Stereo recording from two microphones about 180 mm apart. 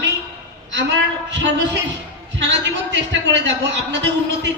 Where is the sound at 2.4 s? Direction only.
85° right.